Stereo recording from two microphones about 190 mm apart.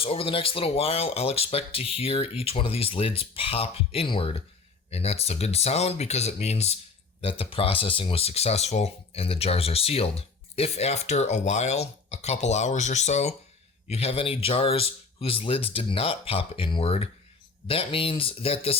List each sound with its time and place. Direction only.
0.0 s speech: 30° left (ahead or behind)